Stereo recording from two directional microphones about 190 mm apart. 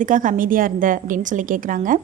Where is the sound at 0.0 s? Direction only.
45° right (ahead or behind).